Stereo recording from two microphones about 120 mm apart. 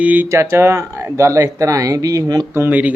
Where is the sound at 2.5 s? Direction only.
15° right (ahead or behind).